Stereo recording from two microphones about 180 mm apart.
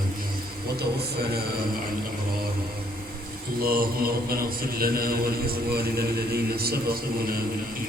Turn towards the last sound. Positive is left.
turn(degrees=-55)  # may be behind; listen again after turning